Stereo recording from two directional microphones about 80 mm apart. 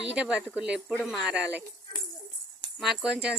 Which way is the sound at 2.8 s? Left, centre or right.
Centre.